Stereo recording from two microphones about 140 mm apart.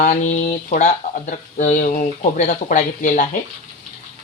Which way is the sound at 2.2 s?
60° left (ahead or behind).